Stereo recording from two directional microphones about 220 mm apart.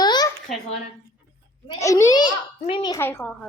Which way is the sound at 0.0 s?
20° left (ahead or behind).